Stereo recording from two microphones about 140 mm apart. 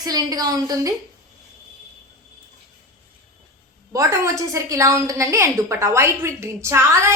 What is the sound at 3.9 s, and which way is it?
A woman's voice, 20° right (ahead or behind).